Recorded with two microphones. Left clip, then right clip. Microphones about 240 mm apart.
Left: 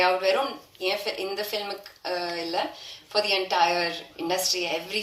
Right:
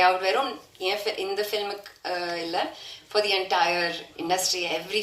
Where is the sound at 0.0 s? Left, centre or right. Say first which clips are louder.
Right 1 dB; right.